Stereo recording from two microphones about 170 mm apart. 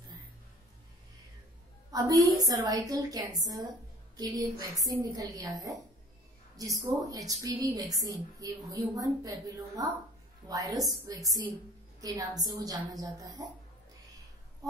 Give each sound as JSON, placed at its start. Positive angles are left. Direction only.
{"t": 1.9, "sound": "a woman's voice", "side_deg": -20}
{"t": 11.1, "sound": "a woman's voice", "side_deg": -20}